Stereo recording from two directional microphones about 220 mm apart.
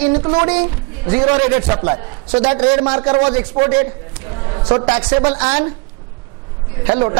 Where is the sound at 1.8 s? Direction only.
25° right (ahead or behind).